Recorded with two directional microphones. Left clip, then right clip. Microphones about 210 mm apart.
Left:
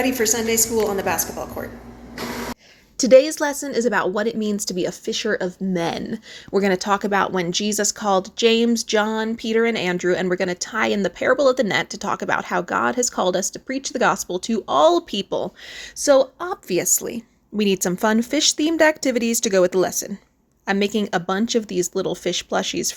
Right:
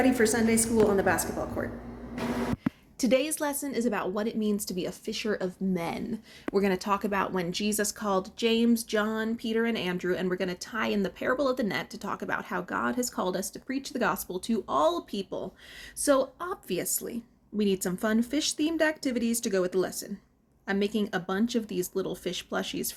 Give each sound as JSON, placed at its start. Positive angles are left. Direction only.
{"t": 0.0, "sound": "a woman's voice", "side_deg": -10}
{"t": 3.0, "sound": "a woman's voice", "side_deg": 35}
{"t": 16.0, "sound": "a woman's voice", "side_deg": 30}